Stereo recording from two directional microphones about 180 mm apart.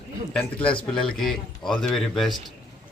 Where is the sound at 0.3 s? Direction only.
5° left (ahead or behind).